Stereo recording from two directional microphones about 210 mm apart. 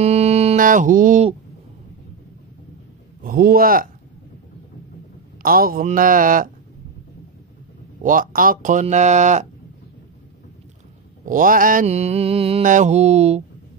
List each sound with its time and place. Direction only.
0.0 s a sound: 30° right (ahead or behind)
3.3 s speech: 45° right (ahead or behind)
5.4 s mantra: 45° right (ahead or behind)
8.0 s mantra: 40° right (ahead or behind)
11.2 s mantra: 40° right (ahead or behind)